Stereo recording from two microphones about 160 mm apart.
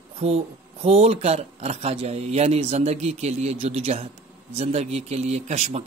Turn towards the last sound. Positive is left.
turn(degrees=-45)  # may be behind; listen again after turning